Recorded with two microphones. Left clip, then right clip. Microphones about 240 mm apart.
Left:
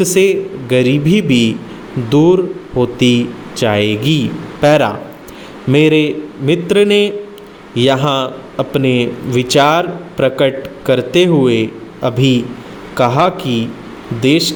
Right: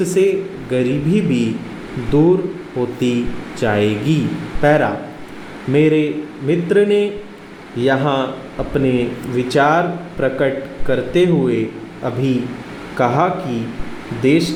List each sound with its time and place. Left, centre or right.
0.0 s speech: left